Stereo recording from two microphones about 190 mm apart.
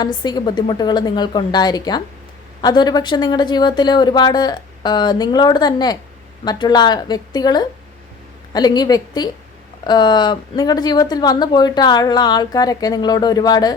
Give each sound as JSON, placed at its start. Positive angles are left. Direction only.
{"t": 0.0, "sound": "speech", "side_deg": 20}